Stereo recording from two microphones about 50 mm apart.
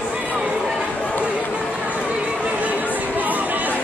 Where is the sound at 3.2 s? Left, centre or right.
Right.